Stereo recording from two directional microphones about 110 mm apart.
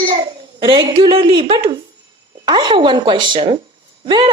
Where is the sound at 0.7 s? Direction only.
45° right (ahead or behind).